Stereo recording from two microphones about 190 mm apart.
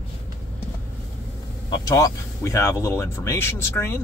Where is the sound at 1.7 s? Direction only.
20° left (ahead or behind).